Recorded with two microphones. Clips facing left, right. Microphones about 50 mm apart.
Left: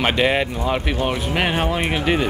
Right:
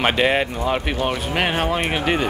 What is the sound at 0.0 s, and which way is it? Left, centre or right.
Speech, centre.